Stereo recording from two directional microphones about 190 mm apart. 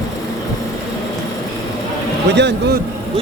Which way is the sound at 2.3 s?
65° right (ahead or behind).